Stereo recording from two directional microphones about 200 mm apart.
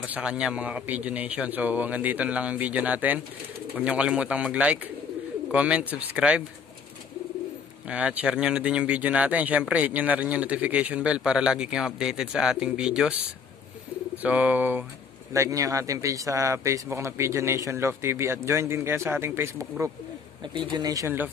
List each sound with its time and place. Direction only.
0.0 s speech: 5° right (ahead or behind)
7.9 s speech: 5° right (ahead or behind)
14.1 s speech: 5° right (ahead or behind)